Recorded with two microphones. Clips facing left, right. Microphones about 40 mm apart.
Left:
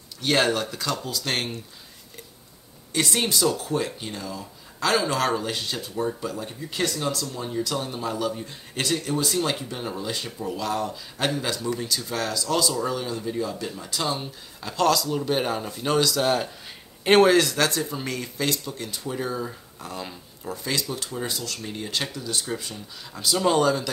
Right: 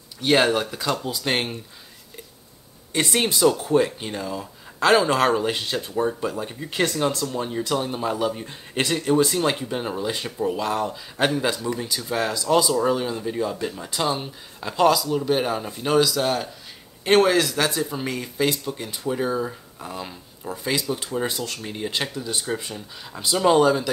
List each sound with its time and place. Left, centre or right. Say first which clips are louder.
0.2 s speech: right 3 dB; centre
2.9 s speech: right 2 dB; right
21.5 s speech: right 2 dB; centre